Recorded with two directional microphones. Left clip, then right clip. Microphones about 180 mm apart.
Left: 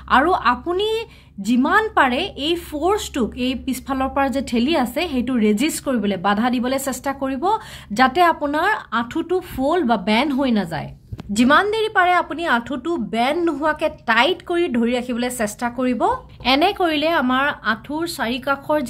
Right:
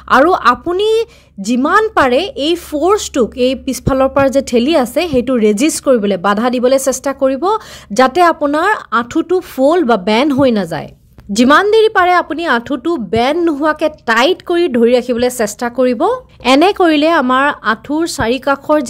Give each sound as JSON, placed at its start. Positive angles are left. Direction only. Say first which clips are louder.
{"t": 0.1, "sound": "a woman's voice", "louder": "right 7 dB", "side_deg": -45}
{"t": 16.4, "sound": "a woman's voice", "louder": "right 8 dB", "side_deg": -50}